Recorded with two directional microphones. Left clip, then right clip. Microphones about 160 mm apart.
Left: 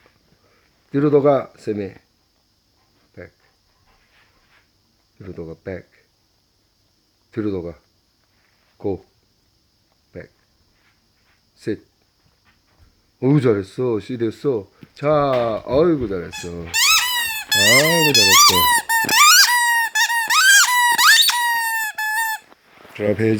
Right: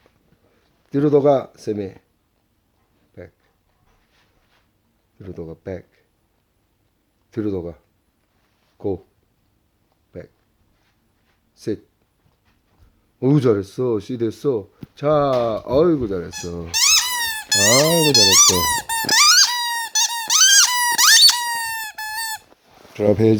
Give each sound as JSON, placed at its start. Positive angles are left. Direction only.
{"t": 0.9, "sound": "speech", "side_deg": -5}
{"t": 5.2, "sound": "speech", "side_deg": -5}
{"t": 7.3, "sound": "speech", "side_deg": -5}
{"t": 8.8, "sound": "speech", "side_deg": -5}
{"t": 10.1, "sound": "speech", "side_deg": -5}
{"t": 11.5, "sound": "speech", "side_deg": -5}
{"t": 13.1, "sound": "speech", "side_deg": -5}
{"t": 18.9, "sound": "squeak", "side_deg": -20}
{"t": 23.0, "sound": "speech", "side_deg": -20}